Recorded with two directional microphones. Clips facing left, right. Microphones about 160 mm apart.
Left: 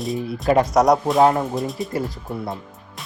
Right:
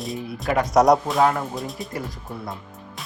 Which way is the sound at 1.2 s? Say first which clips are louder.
Left 4 dB; 25° left (ahead or behind).